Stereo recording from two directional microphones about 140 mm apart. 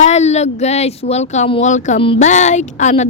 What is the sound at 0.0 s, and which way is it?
Speech, 55° left (ahead or behind).